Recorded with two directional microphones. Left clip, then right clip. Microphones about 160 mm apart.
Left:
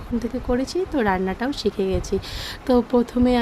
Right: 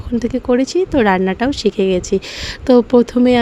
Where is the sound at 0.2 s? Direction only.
45° right (ahead or behind).